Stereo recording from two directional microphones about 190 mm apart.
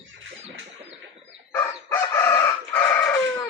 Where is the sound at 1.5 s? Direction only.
10° left (ahead or behind).